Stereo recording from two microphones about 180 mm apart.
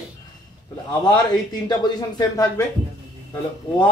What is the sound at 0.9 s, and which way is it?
Speech, 25° left (ahead or behind).